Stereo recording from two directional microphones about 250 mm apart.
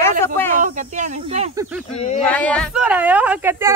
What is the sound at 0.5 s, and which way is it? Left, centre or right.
Snake, right.